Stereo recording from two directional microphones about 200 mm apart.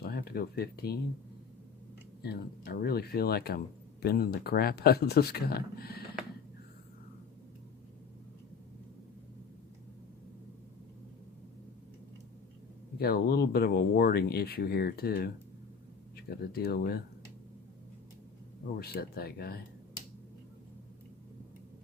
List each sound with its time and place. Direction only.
0.0 s speech: 50° left (ahead or behind)
2.2 s speech: 55° left (ahead or behind)
13.0 s speech: 50° left (ahead or behind)
18.8 s speech: 50° left (ahead or behind)